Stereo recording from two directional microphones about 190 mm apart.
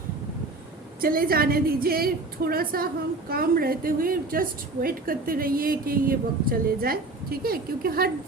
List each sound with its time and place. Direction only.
1.0 s a woman's voice: 50° right (ahead or behind)